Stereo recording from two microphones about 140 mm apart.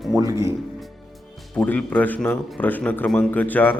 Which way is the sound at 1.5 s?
10° left (ahead or behind).